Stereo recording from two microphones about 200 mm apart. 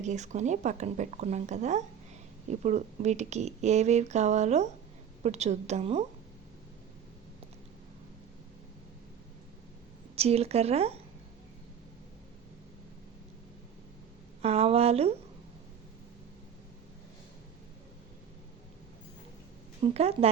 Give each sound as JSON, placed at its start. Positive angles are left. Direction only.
{"t": 0.0, "sound": "speech", "side_deg": -35}
{"t": 10.2, "sound": "speech", "side_deg": -30}
{"t": 14.4, "sound": "speech", "side_deg": -30}
{"t": 19.8, "sound": "speech", "side_deg": -30}